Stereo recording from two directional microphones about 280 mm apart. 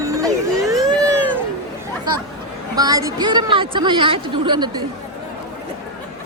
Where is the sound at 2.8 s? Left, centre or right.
Centre.